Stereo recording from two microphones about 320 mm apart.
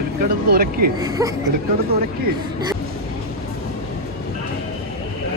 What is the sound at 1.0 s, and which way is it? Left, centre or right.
Speech, centre.